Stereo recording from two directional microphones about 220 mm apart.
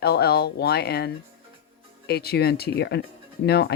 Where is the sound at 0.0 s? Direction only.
45° left (ahead or behind).